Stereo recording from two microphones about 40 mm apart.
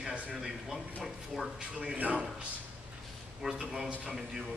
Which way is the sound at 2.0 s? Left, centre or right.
Right.